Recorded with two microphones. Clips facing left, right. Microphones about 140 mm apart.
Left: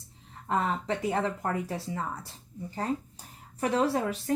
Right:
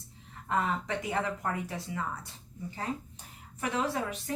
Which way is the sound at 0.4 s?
30° left (ahead or behind).